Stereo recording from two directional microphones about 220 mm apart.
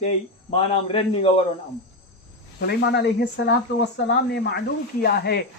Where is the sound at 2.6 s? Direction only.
50° left (ahead or behind).